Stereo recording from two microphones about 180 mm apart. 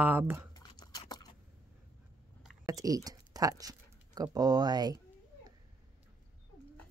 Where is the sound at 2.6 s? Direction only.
20° right (ahead or behind).